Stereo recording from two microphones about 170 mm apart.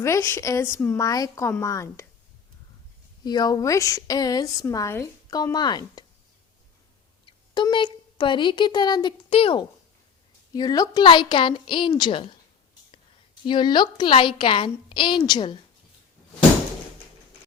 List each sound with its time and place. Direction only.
0.0 s speech: 15° left (ahead or behind)
3.2 s a woman's voice: 25° left (ahead or behind)
7.3 s a sound: 25° left (ahead or behind)
8.2 s a woman's voice: 30° left (ahead or behind)
13.4 s a woman's voice: 25° left (ahead or behind)